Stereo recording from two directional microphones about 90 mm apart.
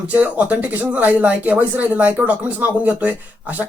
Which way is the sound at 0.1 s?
15° right (ahead or behind).